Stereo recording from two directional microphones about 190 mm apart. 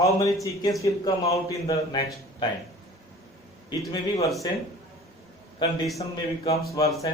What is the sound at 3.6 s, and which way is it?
Speech, 25° left (ahead or behind).